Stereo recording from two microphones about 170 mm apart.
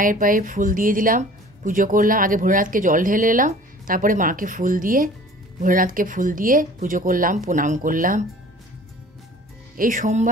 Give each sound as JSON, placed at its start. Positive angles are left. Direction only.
{"t": 0.0, "sound": "speech", "side_deg": -55}
{"t": 9.8, "sound": "speech", "side_deg": -50}